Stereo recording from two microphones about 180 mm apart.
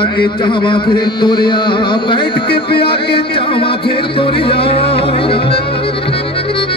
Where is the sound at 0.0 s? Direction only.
25° left (ahead or behind).